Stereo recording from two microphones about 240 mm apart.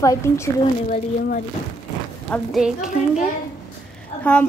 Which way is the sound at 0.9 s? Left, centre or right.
Left.